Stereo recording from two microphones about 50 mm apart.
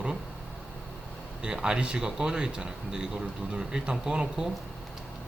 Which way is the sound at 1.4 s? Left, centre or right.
Centre.